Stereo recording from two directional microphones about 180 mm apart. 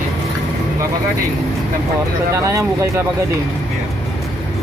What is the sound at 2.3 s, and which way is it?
Speech, 15° right (ahead or behind).